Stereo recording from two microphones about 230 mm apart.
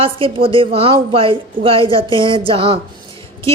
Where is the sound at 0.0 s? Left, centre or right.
Right.